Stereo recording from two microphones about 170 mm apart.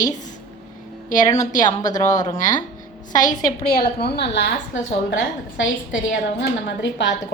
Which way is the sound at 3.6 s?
65° left (ahead or behind).